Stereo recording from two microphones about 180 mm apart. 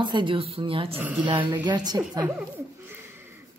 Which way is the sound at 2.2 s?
10° right (ahead or behind).